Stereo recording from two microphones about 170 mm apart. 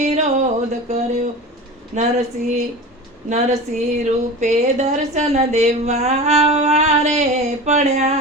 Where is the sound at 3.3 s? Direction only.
40° right (ahead or behind).